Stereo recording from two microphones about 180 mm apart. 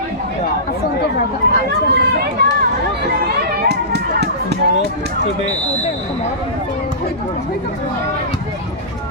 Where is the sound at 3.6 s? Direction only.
65° right (ahead or behind).